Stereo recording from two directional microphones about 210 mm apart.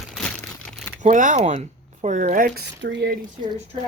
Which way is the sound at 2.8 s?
60° right (ahead or behind).